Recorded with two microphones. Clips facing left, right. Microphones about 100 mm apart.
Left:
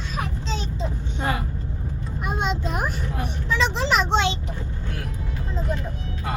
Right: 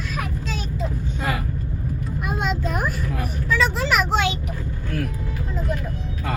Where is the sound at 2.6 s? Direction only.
30° left (ahead or behind).